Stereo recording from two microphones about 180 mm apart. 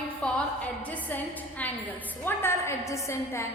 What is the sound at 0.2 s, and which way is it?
A woman's voice, 10° left (ahead or behind).